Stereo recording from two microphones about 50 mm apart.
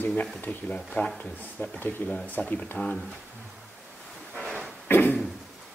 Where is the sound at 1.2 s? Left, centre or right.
Left.